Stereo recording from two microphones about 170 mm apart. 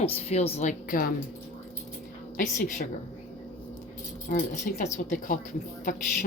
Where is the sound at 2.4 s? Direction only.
50° left (ahead or behind).